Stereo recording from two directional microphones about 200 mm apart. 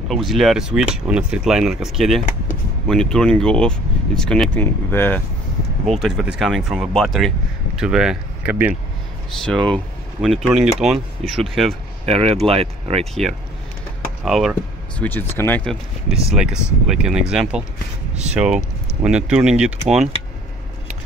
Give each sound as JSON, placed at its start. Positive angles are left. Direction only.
{"t": 0.1, "sound": "speech", "side_deg": 0}
{"t": 5.9, "sound": "speech", "side_deg": 0}
{"t": 9.4, "sound": "speech", "side_deg": 5}
{"t": 12.1, "sound": "speech", "side_deg": -30}
{"t": 14.2, "sound": "speech", "side_deg": 0}
{"t": 15.0, "sound": "speech", "side_deg": 10}